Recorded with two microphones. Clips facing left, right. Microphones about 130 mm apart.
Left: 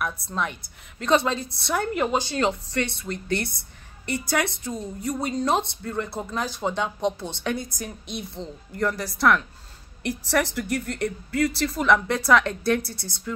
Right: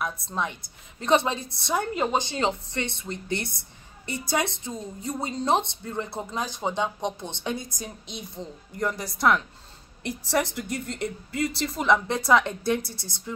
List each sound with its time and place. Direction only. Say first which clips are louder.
0.0 s a woman's voice: left 1 dB; 20° right (ahead or behind)
7.8 s a woman's voice: left 4 dB; 65° left (ahead or behind)
8.7 s a woman's voice: left 3 dB; 20° right (ahead or behind)